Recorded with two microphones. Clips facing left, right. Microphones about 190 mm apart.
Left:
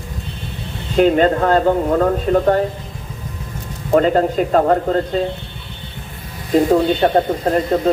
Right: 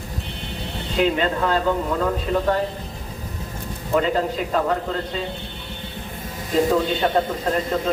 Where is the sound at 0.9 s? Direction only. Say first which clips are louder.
Left 8 dB; 45° left (ahead or behind).